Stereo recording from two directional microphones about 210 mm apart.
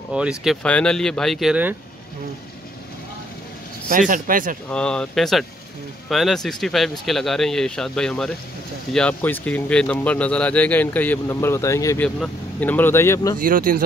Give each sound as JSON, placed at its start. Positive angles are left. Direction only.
{"t": 0.1, "sound": "speech", "side_deg": -5}
{"t": 4.1, "sound": "speech", "side_deg": -40}
{"t": 4.6, "sound": "speech", "side_deg": 5}
{"t": 13.4, "sound": "speech", "side_deg": -40}